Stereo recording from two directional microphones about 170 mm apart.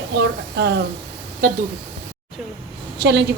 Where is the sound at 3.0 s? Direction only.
75° right (ahead or behind).